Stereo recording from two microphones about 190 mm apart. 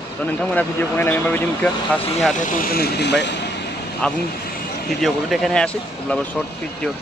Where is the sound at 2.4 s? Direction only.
45° left (ahead or behind); by 3.4 s 65° left (ahead or behind).